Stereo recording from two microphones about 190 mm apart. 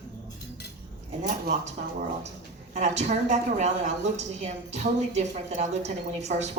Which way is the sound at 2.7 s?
35° right (ahead or behind).